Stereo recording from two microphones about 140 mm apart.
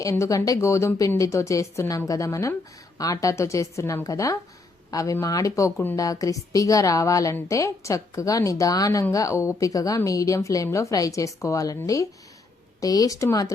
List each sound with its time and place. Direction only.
0.0 s a woman's voice: 20° left (ahead or behind)
6.0 s a woman's voice: 25° left (ahead or behind)